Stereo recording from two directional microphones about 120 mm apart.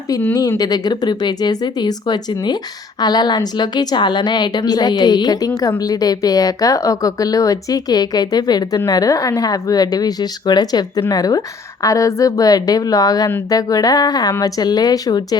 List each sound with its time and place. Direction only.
0.3 s speech: 30° left (ahead or behind)